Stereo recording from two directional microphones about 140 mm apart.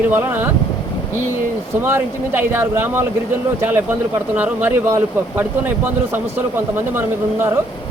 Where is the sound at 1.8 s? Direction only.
15° right (ahead or behind).